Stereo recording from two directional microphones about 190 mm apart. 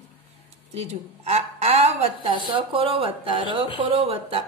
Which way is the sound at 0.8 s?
35° right (ahead or behind).